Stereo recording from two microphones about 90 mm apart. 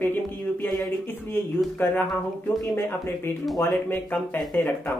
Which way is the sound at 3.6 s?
20° left (ahead or behind).